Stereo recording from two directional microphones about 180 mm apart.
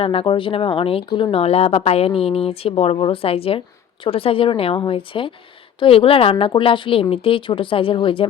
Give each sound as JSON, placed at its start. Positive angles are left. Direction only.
{"t": 0.0, "sound": "speech", "side_deg": 30}